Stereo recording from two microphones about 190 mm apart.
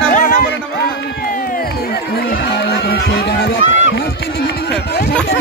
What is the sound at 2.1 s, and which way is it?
Music, 55° left (ahead or behind).